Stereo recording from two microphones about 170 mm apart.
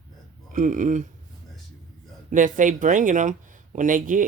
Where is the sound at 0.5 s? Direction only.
50° right (ahead or behind).